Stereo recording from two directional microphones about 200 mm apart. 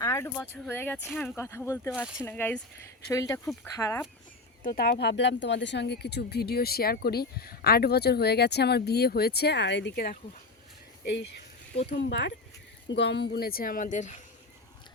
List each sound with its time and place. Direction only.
0.0 s speech: 15° left (ahead or behind)
1.9 s speech: 5° right (ahead or behind)
2.2 s speech: 10° left (ahead or behind)
4.6 s speech: 50° left (ahead or behind)